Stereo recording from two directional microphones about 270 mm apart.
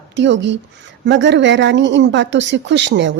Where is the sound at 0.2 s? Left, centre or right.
Right.